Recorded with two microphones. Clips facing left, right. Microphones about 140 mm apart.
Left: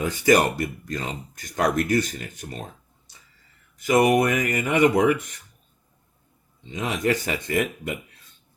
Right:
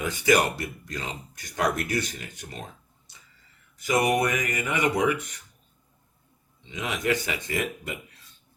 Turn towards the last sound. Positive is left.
turn(degrees=50)  # may be behind; listen again after turning